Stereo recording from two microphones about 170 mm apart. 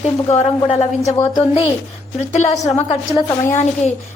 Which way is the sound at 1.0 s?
20° left (ahead or behind).